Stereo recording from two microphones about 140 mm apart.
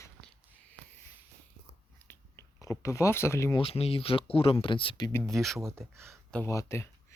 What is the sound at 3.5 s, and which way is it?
Speech, 45° left (ahead or behind).